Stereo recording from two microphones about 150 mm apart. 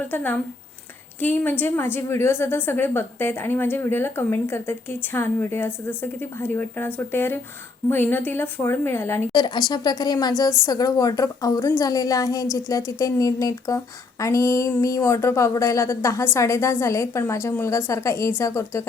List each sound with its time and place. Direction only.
0.1 s a woman's voice: 10° left (ahead or behind)
9.3 s speech: 25° left (ahead or behind)